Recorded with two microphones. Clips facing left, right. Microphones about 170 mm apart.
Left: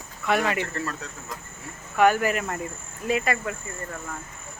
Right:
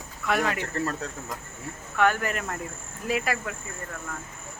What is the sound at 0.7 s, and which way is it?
Speech, 40° right (ahead or behind).